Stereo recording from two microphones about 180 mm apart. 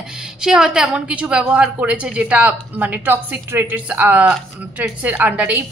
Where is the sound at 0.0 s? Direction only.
5° right (ahead or behind).